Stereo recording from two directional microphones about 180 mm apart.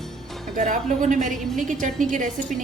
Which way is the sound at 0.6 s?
45° right (ahead or behind).